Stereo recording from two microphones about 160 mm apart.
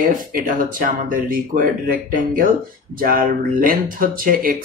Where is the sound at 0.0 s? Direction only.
60° right (ahead or behind).